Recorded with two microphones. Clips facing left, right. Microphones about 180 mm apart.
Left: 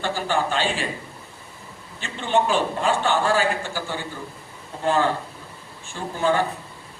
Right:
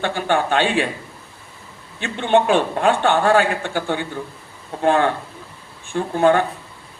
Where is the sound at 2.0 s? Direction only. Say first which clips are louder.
Right 5 dB; 60° right (ahead or behind).